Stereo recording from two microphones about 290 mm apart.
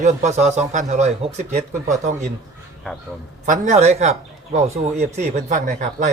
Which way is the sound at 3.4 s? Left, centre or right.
Right.